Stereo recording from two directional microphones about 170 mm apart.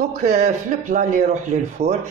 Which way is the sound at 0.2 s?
45° right (ahead or behind).